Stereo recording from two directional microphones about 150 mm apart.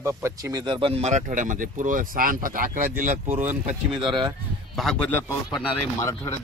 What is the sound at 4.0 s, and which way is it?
Speech, 30° right (ahead or behind).